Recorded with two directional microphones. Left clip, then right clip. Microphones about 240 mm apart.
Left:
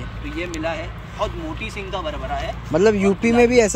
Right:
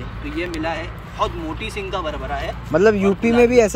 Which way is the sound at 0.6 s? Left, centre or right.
Centre.